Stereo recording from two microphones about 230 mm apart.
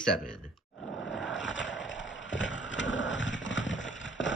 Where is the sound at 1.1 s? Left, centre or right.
Left.